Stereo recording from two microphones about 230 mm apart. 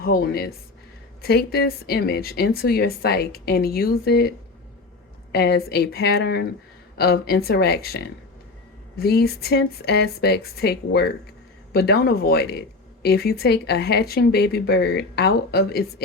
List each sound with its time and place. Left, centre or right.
0.0 s speech: left
5.3 s speech: left